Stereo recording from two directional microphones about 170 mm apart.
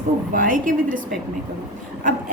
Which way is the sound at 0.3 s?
55° right (ahead or behind).